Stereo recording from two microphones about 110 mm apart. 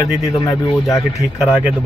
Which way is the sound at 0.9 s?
30° left (ahead or behind).